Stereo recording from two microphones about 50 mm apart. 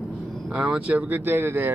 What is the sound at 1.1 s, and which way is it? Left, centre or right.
Speech, right.